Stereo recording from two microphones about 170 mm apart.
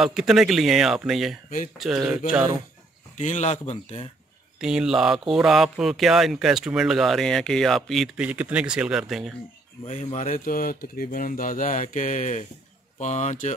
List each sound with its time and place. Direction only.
0.0 s speech: centre (ahead or behind)
3.2 s speech: 45° left (ahead or behind)
4.6 s speech: 5° right (ahead or behind)
9.8 s speech: 40° left (ahead or behind)